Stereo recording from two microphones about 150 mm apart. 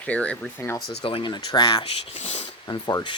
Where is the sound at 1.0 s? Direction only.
35° left (ahead or behind).